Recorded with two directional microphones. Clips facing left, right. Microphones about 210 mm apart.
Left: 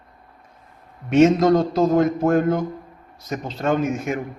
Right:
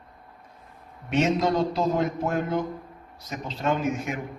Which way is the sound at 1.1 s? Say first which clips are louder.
Left 9 dB; 45° left (ahead or behind).